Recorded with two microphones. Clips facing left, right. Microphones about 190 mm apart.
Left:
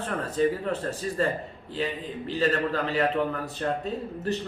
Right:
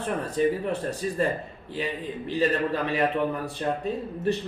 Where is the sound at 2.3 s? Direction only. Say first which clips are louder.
Right 1 dB; 15° right (ahead or behind).